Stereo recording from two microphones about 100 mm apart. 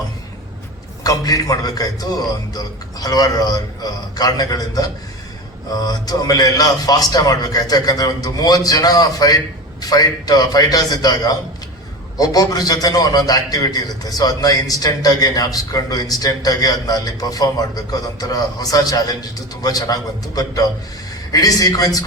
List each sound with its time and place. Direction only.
1.0 s a man's voice: 35° left (ahead or behind)